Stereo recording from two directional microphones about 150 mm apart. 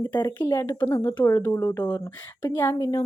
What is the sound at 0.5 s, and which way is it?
A woman's voice, 15° left (ahead or behind).